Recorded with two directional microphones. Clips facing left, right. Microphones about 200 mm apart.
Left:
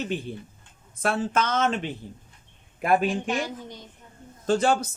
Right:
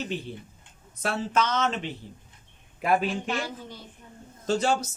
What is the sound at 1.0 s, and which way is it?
Speech, 50° left (ahead or behind).